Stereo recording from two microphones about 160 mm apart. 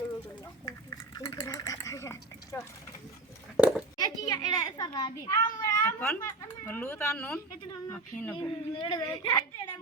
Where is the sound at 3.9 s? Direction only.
25° left (ahead or behind).